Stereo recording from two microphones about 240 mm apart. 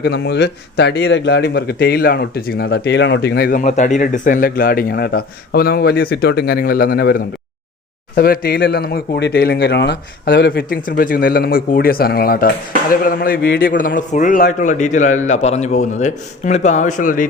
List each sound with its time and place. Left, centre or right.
0.0 s speech: left